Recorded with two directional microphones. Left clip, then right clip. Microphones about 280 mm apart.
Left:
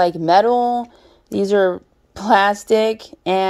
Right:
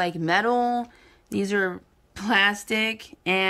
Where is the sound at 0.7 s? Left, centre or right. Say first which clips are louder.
Left 6 dB; centre.